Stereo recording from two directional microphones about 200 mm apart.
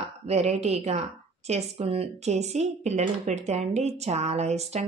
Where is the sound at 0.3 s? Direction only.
35° right (ahead or behind).